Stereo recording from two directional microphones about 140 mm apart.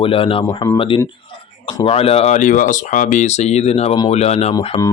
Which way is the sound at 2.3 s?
70° left (ahead or behind).